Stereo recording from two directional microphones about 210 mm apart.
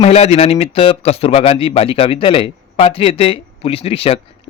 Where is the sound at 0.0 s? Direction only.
30° left (ahead or behind).